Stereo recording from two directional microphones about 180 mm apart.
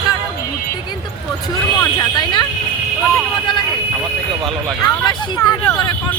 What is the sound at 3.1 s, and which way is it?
Vehicle, 25° left (ahead or behind).